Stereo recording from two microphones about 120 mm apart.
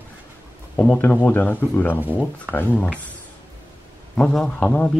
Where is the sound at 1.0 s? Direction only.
15° left (ahead or behind).